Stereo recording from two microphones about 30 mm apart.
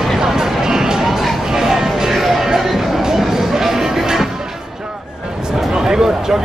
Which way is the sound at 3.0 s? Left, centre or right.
Centre.